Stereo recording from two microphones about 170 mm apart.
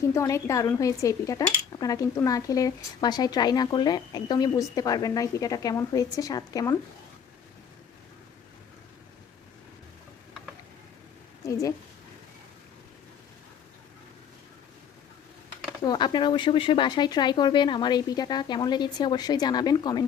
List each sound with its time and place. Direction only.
0.1 s speech: 15° left (ahead or behind)
11.4 s a woman's voice: 20° left (ahead or behind)
15.8 s speech: 25° left (ahead or behind)